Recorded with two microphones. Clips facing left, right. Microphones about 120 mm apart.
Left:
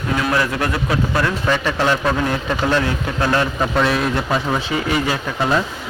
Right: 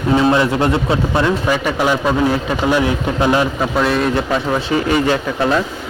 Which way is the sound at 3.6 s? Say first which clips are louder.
Right 2 dB; centre (ahead or behind).